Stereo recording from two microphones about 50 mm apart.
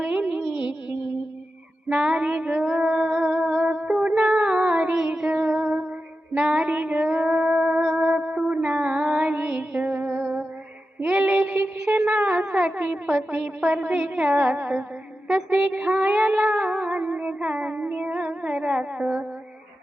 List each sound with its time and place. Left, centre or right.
0.0 s music: right
4.9 s child singing: centre
6.5 s music: right
9.5 s music: centre
9.8 s music: right
11.0 s a sound: right
12.0 s a sound: right
12.4 s a woman's voice: right
14.0 s music: right
15.4 s child singing: centre